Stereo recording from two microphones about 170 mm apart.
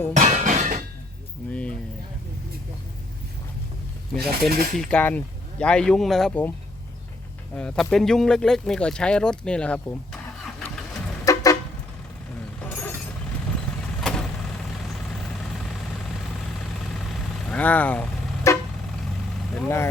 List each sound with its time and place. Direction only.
0.2 s chink: 45° right (ahead or behind)
1.5 s a sound: 5° left (ahead or behind)
4.2 s speech: 60° right (ahead or behind)
4.8 s speech: 5° left (ahead or behind)
7.5 s speech: 5° left (ahead or behind)
11.3 s vehicle: 20° left (ahead or behind)
12.6 s a sound: 10° left (ahead or behind)
14.0 s vehicle: 5° left (ahead or behind)
17.4 s vehicle: 10° left (ahead or behind)
19.5 s speech: 10° left (ahead or behind)